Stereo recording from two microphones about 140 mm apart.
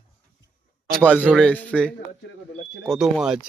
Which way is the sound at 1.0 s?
10° left (ahead or behind).